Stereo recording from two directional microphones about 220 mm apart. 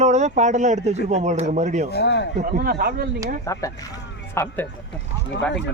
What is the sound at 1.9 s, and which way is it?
Speech, 50° left (ahead or behind).